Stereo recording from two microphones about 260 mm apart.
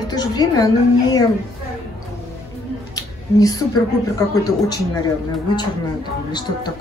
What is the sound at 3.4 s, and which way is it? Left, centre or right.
A woman's voice, centre.